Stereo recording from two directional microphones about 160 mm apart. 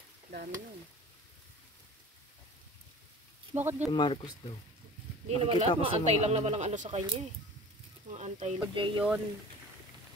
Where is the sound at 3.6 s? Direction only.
15° right (ahead or behind).